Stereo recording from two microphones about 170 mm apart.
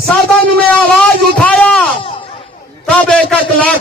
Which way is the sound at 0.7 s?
5° left (ahead or behind).